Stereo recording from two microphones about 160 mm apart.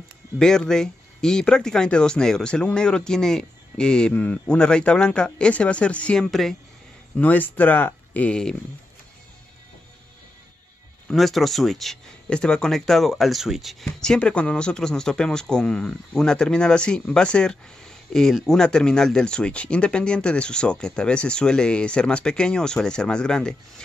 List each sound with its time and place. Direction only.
0.4 s speech: 5° left (ahead or behind)
11.1 s speech: centre (ahead or behind)